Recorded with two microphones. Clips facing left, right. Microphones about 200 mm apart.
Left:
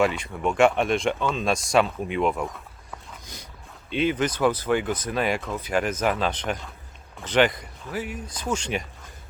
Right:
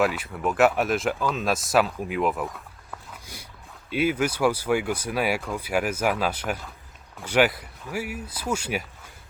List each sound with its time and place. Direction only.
0.0 s speech: 5° right (ahead or behind)